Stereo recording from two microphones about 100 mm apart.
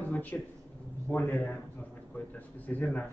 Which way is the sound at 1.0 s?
20° left (ahead or behind).